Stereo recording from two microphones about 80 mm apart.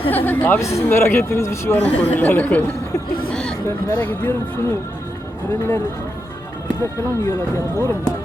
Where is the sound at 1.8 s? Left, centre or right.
Left.